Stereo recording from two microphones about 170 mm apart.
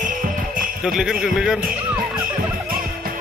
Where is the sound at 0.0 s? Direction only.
50° right (ahead or behind).